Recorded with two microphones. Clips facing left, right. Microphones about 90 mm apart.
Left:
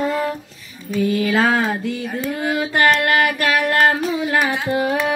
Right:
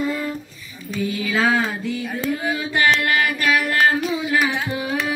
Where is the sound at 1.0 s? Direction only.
50° left (ahead or behind).